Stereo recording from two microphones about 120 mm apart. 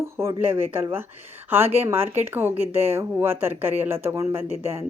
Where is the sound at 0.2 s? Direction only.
20° right (ahead or behind).